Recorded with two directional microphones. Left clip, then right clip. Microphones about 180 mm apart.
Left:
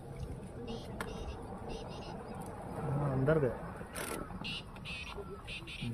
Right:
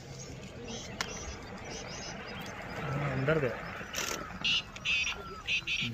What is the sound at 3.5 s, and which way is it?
Vehicle, 40° left (ahead or behind).